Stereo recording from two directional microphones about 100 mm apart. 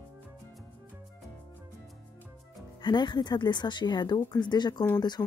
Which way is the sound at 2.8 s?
45° left (ahead or behind).